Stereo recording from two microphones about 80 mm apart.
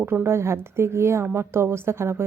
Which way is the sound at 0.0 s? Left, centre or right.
Right.